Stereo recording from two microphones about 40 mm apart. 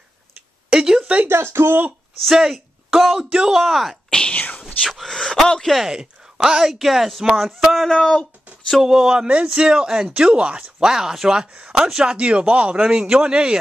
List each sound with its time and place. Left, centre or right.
0.3 s a sound: centre
1.2 s speech: right
2.2 s speech: centre
3.1 s speech: centre
3.5 s speech: centre
4.3 s whispering: left
4.8 s speech: centre
5.7 s speech: centre
5.9 s speech: centre
7.7 s speech: centre
8.7 s speech: centre
10.9 s speech: centre
12.0 s speech: right